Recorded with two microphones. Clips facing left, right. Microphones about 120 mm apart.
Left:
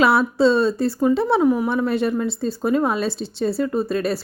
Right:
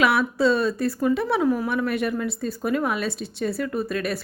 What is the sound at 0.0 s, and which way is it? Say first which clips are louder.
Speech: left 4 dB; 30° left (ahead or behind).